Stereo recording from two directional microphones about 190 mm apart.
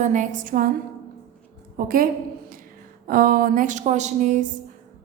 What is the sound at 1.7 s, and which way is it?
A woman's voice, 50° right (ahead or behind).